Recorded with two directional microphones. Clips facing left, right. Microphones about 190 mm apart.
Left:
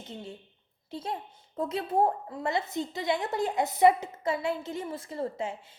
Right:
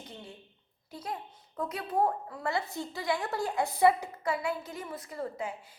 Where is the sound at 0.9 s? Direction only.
25° left (ahead or behind).